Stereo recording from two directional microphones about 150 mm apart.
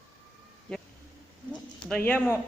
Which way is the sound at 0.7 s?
5° left (ahead or behind).